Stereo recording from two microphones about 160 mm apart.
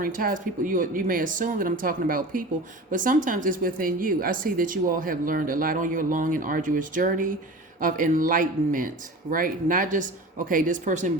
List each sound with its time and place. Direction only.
0.0 s speech: 60° right (ahead or behind)